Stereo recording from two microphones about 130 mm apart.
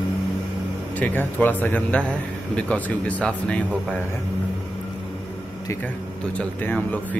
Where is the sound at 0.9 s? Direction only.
15° left (ahead or behind).